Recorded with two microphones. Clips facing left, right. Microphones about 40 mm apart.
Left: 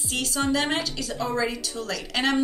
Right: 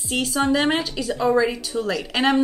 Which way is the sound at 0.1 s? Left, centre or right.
Centre.